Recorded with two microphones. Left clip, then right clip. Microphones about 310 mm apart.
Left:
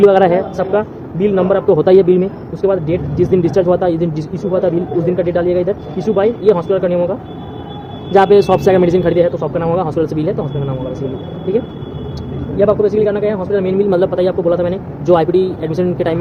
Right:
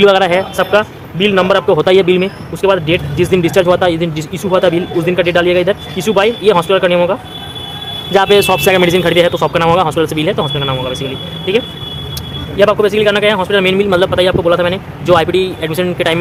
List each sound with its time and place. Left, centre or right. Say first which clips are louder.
0.0 s speech: even; right
1.6 s a man's voice: right 1 dB; right
1.9 s speech: even; centre
12.5 s speech: right 2 dB; right
14.0 s a man's voice: right 3 dB; centre